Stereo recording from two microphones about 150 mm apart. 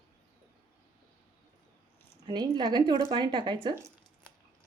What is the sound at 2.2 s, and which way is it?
A woman's voice, 30° right (ahead or behind).